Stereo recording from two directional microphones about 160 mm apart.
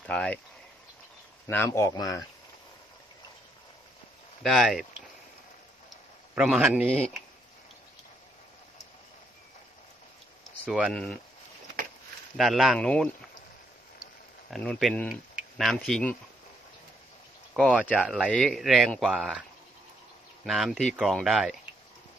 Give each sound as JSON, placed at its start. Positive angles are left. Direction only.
{"t": 0.0, "sound": "speech", "side_deg": 5}
{"t": 1.5, "sound": "speech", "side_deg": 15}
{"t": 4.4, "sound": "speech", "side_deg": 0}
{"t": 6.3, "sound": "a man's voice", "side_deg": -10}
{"t": 10.7, "sound": "a man's voice", "side_deg": -5}
{"t": 10.9, "sound": "speech", "side_deg": 5}
{"t": 12.4, "sound": "speech", "side_deg": 0}
{"t": 14.5, "sound": "speech", "side_deg": 5}
{"t": 17.9, "sound": "a man's voice", "side_deg": -5}
{"t": 18.3, "sound": "speech", "side_deg": 5}
{"t": 20.4, "sound": "speech", "side_deg": 0}